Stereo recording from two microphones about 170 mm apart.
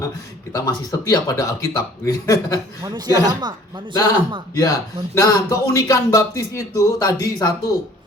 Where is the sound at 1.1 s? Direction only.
20° left (ahead or behind).